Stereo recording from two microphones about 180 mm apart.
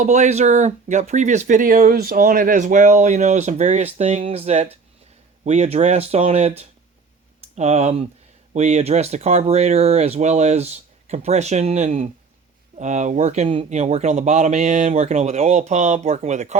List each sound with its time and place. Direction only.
0.0 s speech: 40° right (ahead or behind)
7.5 s speech: 35° right (ahead or behind)